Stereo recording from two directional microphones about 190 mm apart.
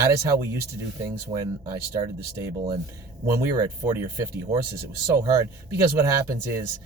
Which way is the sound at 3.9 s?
15° right (ahead or behind).